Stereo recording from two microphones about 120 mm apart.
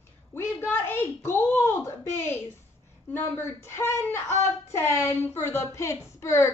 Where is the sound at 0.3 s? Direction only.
20° left (ahead or behind).